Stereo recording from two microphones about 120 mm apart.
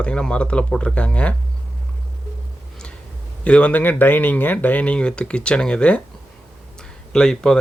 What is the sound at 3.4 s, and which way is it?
Speech, 10° left (ahead or behind).